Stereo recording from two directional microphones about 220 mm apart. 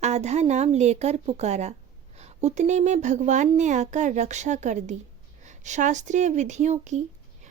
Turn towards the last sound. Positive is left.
turn(degrees=-30)  # may be behind; listen again after turning